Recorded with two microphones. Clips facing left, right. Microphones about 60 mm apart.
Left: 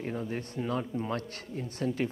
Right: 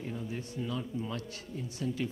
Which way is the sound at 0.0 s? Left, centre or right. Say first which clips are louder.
Left 4 dB; left.